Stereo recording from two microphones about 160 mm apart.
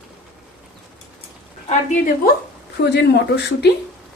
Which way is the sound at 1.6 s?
55° left (ahead or behind).